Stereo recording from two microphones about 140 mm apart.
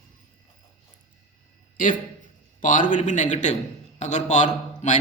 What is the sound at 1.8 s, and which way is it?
A man's voice, 70° left (ahead or behind).